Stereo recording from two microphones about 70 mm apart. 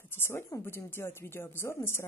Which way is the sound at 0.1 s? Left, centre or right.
Left.